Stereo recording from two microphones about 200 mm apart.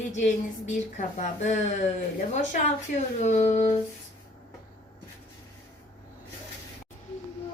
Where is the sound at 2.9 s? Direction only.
40° left (ahead or behind).